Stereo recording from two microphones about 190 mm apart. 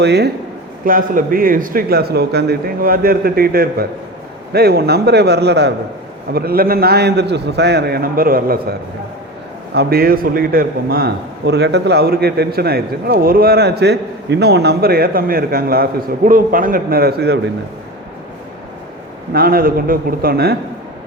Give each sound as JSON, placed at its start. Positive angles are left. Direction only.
{"t": 0.0, "sound": "a man's voice", "side_deg": -60}
{"t": 0.9, "sound": "a man's voice", "side_deg": -45}
{"t": 9.7, "sound": "a man's voice", "side_deg": -55}
{"t": 19.3, "sound": "a man's voice", "side_deg": -50}